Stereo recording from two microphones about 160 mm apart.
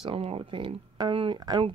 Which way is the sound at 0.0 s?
35° right (ahead or behind).